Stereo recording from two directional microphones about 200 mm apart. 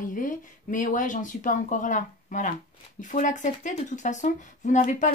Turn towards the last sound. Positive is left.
turn(degrees=40)  # may be behind; listen again after turning